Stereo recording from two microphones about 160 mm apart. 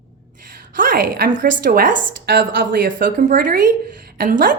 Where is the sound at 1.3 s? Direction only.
55° right (ahead or behind).